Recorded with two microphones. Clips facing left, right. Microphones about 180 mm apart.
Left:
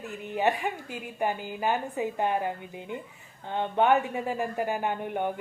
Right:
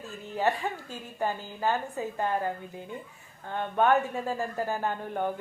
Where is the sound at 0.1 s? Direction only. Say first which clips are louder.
Left 1 dB; 20° left (ahead or behind).